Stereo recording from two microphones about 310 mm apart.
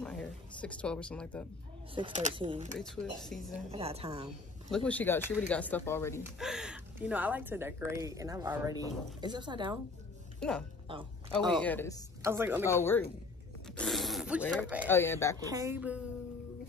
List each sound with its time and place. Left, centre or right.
0.0 s speech: centre
2.0 s speech: centre
2.8 s speech: centre
3.7 s speech: centre
4.6 s speech: centre
6.5 s a woman's voice: centre
10.4 s speech: centre
10.9 s a woman's voice: centre
11.5 s speech: centre
12.2 s speech: centre
12.6 s speech: centre
14.9 s speech: centre
15.5 s a woman's voice: centre